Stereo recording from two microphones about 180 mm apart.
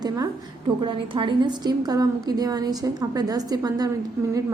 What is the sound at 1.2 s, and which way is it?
A woman's voice, 25° right (ahead or behind).